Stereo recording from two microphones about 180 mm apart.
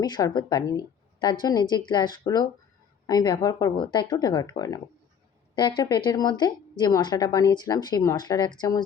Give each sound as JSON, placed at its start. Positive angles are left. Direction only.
{"t": 0.0, "sound": "a woman's voice", "side_deg": 20}